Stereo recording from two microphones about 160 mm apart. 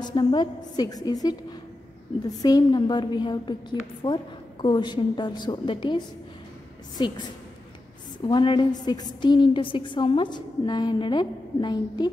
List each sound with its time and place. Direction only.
0.0 s a woman's voice: 30° left (ahead or behind)
2.4 s a woman's voice: 25° left (ahead or behind)
8.2 s a woman's voice: 30° left (ahead or behind)